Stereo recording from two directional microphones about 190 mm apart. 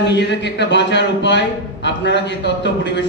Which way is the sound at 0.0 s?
65° left (ahead or behind).